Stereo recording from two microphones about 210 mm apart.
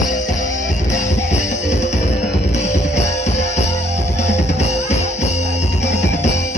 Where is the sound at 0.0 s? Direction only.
35° left (ahead or behind).